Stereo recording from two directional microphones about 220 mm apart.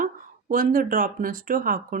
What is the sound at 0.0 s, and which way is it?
Speech, 40° right (ahead or behind).